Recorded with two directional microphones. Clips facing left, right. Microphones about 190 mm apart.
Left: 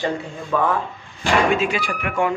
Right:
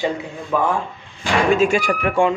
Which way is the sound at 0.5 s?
15° right (ahead or behind).